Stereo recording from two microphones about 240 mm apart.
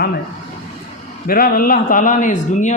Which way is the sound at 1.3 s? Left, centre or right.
Left.